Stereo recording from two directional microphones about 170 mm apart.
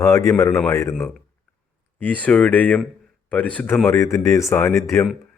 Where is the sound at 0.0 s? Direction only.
20° left (ahead or behind).